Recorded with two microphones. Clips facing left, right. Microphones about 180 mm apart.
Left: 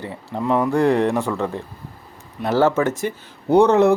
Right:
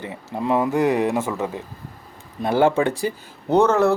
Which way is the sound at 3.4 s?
15° left (ahead or behind).